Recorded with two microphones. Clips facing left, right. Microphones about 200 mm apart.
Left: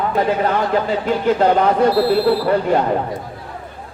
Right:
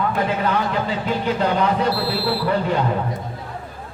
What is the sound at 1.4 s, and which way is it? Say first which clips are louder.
A man's voice: left 5 dB; 50° left (ahead or behind).